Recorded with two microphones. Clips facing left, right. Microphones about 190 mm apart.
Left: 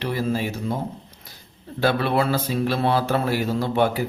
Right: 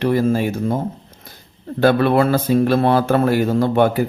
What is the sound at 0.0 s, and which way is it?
Speech, 50° right (ahead or behind).